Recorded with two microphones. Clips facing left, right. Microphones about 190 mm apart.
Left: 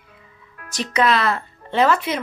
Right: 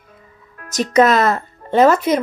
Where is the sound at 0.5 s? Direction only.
45° right (ahead or behind).